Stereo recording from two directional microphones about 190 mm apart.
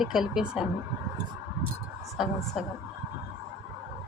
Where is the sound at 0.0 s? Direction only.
Centre (ahead or behind).